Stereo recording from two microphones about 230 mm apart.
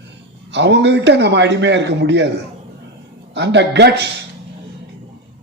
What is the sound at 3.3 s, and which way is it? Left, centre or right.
Speech, right.